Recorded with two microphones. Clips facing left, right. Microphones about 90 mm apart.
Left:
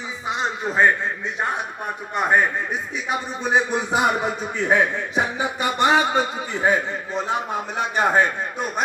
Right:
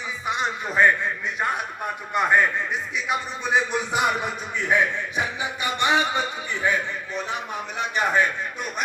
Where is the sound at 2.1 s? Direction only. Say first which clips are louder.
Left 1 dB; 30° left (ahead or behind).